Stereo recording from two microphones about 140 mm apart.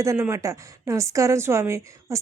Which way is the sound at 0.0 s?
20° right (ahead or behind).